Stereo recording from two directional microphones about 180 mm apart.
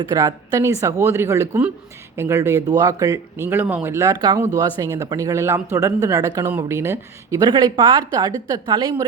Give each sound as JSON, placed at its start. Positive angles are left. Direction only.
{"t": 0.1, "sound": "a woman's voice", "side_deg": -20}